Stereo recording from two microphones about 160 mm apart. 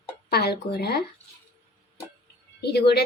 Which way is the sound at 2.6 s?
90° left.